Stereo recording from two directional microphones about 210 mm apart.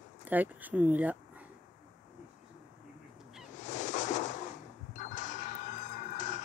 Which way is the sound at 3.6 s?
35° left (ahead or behind).